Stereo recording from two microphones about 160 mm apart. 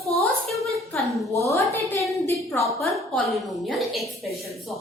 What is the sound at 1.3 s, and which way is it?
A woman's voice, 20° left (ahead or behind).